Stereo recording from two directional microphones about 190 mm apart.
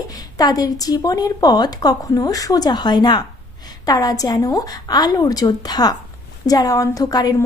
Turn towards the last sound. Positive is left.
turn(degrees=20)  # may be behind; listen again after turning